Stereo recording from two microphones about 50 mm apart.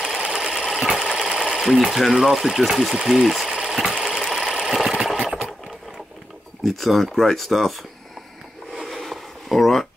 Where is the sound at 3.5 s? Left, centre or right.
Centre.